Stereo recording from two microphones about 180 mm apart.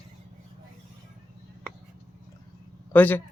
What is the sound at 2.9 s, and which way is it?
Speech, 10° left (ahead or behind).